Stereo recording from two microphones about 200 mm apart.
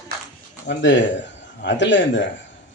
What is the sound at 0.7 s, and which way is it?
Speech, 65° left (ahead or behind).